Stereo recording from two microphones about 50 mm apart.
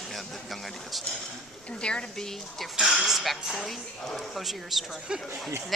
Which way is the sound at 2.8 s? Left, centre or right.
Centre.